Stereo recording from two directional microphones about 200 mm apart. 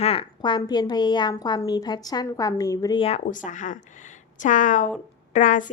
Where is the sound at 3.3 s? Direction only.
40° left (ahead or behind).